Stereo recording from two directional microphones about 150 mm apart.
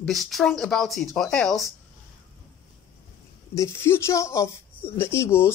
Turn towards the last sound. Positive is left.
turn(degrees=15)  # may be behind; listen again after turning